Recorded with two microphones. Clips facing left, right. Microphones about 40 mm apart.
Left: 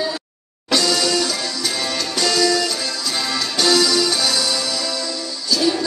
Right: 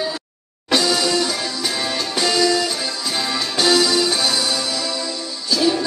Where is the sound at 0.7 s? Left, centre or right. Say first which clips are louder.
Even; centre.